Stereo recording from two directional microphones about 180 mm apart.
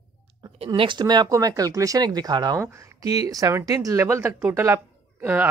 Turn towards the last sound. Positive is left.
turn(degrees=-10)  # may be behind; listen again after turning